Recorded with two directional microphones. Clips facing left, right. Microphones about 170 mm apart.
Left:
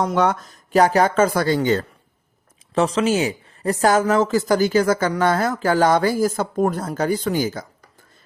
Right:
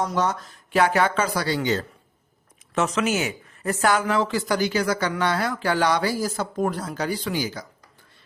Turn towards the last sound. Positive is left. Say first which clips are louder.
# left 5 dB
turn(degrees=50)  # may be behind; listen again after turning